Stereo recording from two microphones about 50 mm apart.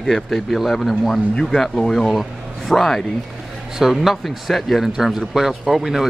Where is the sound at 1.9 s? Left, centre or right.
Centre.